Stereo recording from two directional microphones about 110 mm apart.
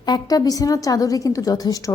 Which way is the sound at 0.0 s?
35° left (ahead or behind).